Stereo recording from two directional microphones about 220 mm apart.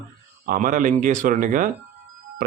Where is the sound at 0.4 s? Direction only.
35° right (ahead or behind).